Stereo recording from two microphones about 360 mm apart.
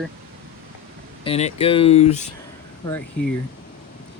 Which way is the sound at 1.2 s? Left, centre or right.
Centre.